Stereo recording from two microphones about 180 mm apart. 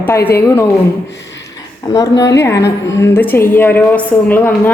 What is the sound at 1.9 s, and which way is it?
Speech, 20° left (ahead or behind).